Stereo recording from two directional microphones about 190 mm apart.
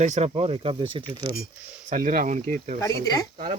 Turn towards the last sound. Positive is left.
turn(degrees=-40)  # may be behind; listen again after turning